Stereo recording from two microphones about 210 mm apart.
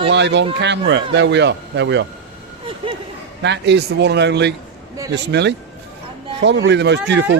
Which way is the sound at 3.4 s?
55° right (ahead or behind).